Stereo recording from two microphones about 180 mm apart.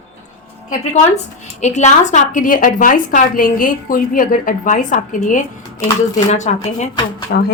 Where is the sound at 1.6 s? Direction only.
40° left (ahead or behind).